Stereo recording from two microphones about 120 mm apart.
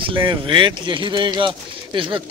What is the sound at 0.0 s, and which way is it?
Speech, 40° right (ahead or behind).